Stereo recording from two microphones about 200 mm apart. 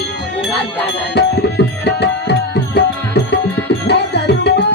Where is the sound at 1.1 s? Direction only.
55° left (ahead or behind).